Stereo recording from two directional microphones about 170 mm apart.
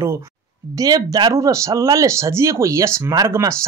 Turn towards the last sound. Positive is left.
turn(degrees=-20)  # may be behind; listen again after turning